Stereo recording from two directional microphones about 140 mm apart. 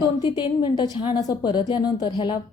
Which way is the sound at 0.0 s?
35° left (ahead or behind).